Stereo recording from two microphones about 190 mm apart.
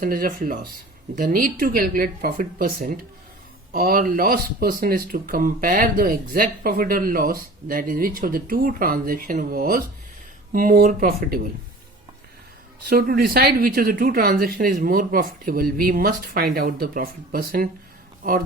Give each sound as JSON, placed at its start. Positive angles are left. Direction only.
{"t": 0.0, "sound": "speech", "side_deg": -45}
{"t": 12.9, "sound": "speech", "side_deg": -50}